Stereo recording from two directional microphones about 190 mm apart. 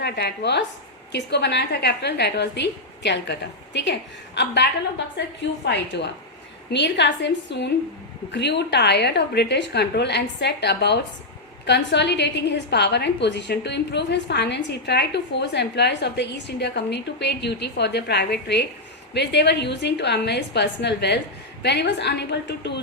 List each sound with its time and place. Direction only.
0.0 s a woman's voice: 60° left (ahead or behind)